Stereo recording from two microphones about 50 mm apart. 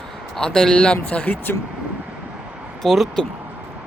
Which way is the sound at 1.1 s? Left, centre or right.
Left.